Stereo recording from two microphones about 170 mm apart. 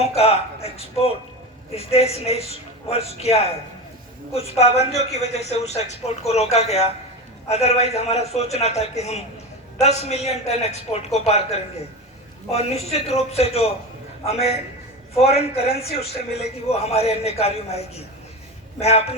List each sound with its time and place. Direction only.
0.0 s a man's voice: 35° left (ahead or behind)